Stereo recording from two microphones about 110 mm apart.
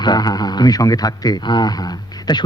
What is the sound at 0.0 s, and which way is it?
Speech, 40° left (ahead or behind).